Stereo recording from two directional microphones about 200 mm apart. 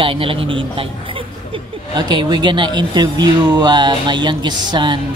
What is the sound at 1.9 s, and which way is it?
A woman's voice, 20° right (ahead or behind).